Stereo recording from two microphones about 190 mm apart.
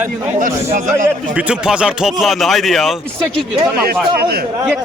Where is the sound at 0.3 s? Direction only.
45° right (ahead or behind).